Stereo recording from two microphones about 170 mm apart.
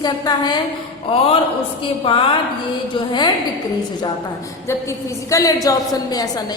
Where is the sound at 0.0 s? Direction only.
25° left (ahead or behind).